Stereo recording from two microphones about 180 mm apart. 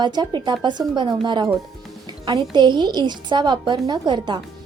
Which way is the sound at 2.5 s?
25° right (ahead or behind).